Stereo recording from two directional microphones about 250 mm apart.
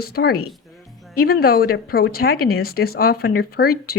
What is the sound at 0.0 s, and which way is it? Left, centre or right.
Speech, left.